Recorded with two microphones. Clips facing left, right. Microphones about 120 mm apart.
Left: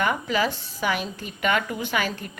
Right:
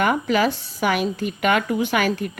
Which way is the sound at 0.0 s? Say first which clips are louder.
Right 5 dB; 55° right (ahead or behind).